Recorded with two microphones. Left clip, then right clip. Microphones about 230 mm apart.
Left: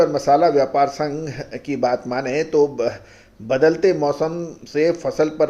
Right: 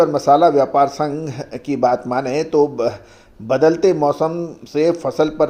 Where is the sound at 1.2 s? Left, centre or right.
Centre.